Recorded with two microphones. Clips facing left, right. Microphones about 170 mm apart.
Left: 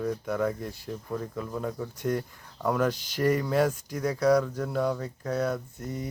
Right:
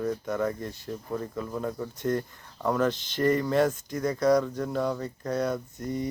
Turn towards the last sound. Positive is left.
turn(degrees=10)  # may be behind; listen again after turning